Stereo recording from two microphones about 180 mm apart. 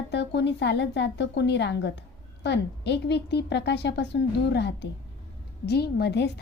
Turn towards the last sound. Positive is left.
turn(degrees=65)  # may be behind; listen again after turning